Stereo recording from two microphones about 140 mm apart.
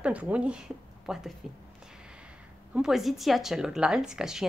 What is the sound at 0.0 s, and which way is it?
Speech, 10° right (ahead or behind).